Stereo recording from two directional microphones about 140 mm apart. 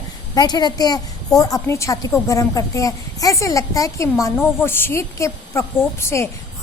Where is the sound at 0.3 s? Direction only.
30° left (ahead or behind).